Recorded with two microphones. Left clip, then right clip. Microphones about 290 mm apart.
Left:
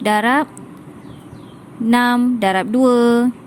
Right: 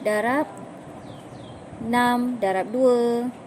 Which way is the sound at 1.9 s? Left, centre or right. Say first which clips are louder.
Left 6 dB; left.